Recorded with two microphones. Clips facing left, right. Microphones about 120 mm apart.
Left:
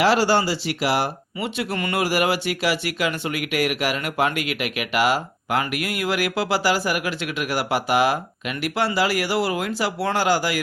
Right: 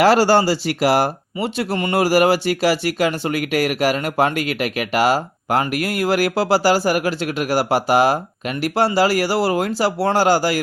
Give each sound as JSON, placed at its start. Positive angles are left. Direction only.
{"t": 0.0, "sound": "speech", "side_deg": -45}